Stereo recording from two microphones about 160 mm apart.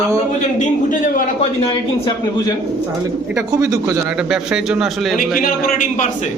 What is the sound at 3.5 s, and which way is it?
Speech, 20° right (ahead or behind).